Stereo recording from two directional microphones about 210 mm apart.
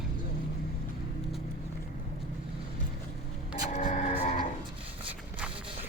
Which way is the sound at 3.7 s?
30° left (ahead or behind).